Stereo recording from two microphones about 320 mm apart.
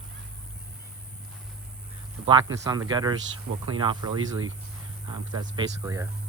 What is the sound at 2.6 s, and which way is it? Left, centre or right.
Speech, centre.